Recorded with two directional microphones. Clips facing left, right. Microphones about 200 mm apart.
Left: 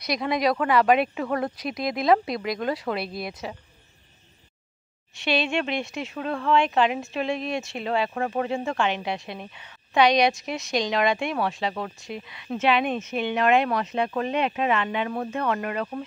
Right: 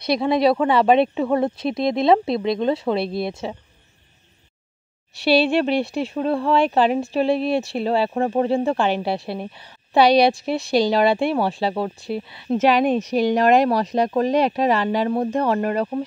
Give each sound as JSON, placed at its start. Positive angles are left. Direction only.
{"t": 0.0, "sound": "speech", "side_deg": -30}
{"t": 5.1, "sound": "speech", "side_deg": -35}